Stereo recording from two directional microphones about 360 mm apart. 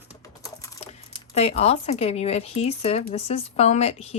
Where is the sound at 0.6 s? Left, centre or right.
Centre.